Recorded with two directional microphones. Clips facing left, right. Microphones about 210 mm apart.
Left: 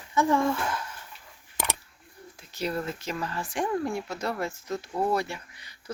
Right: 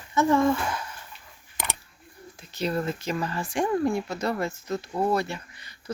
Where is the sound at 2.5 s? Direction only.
10° left (ahead or behind).